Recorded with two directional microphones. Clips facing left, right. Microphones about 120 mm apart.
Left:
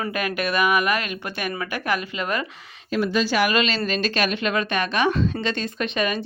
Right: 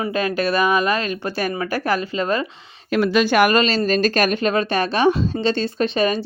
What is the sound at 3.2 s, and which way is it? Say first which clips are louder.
Speech: right 5 dB; 55° right (ahead or behind).